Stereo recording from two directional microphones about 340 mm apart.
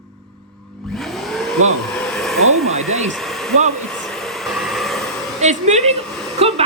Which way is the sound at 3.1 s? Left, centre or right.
Centre.